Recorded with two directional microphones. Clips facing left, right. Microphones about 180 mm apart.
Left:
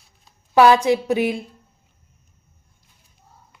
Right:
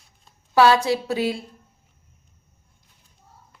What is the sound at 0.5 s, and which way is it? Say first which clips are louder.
Speech: left 3 dB; 20° left (ahead or behind).